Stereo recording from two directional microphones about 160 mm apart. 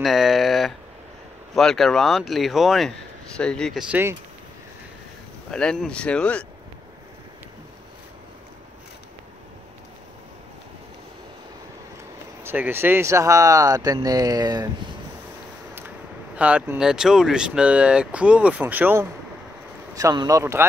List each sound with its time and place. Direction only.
0.0 s speech: centre (ahead or behind)
5.5 s speech: 5° left (ahead or behind)
12.4 s speech: 15° right (ahead or behind)
16.3 s speech: 10° right (ahead or behind)